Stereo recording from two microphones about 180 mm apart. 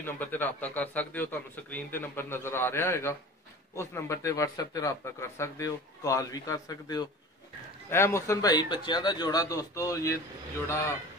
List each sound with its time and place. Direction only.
0.0 s a man's voice: 10° left (ahead or behind)